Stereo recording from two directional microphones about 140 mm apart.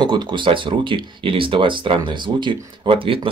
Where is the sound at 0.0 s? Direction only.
30° right (ahead or behind).